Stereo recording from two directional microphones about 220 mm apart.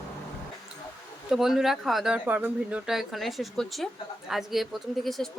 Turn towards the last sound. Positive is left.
turn(degrees=0)  # may be behind; listen again after turning